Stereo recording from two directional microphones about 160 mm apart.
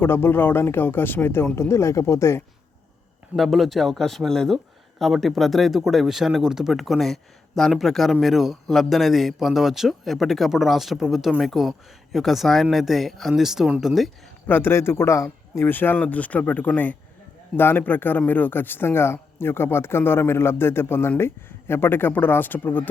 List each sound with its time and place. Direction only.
0.0 s speech: 15° left (ahead or behind)
3.3 s speech: centre (ahead or behind)
14.4 s speech: 10° left (ahead or behind)